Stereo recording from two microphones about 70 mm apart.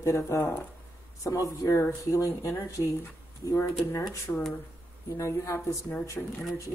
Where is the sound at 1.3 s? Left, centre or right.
Left.